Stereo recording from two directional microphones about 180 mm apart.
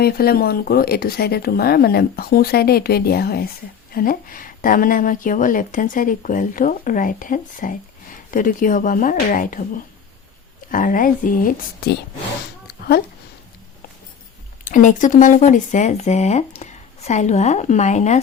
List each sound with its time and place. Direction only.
0.0 s a woman's voice: 55° left (ahead or behind)
14.6 s speech: 45° left (ahead or behind)